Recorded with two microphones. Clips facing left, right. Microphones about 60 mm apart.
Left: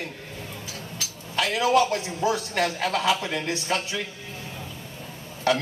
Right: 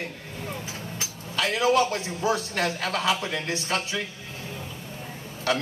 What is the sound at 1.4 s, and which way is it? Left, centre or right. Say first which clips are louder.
A man's voice: left 1 dB; right.